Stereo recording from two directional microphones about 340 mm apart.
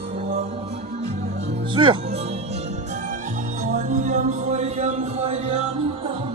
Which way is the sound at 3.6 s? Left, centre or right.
Right.